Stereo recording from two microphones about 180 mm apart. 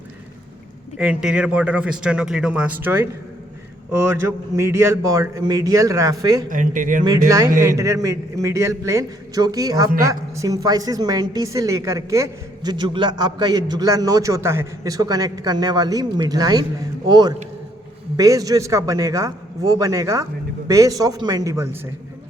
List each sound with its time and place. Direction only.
0.9 s a man's voice: 5° right (ahead or behind)
6.5 s speech: 45° right (ahead or behind)
7.3 s a man's voice: 15° right (ahead or behind)